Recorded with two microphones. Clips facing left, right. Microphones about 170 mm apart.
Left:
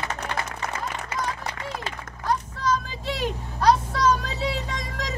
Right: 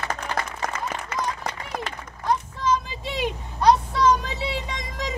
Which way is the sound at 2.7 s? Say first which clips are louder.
Right 1 dB; 15° right (ahead or behind).